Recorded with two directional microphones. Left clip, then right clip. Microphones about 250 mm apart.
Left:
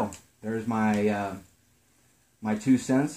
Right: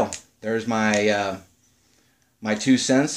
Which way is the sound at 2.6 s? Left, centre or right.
Left.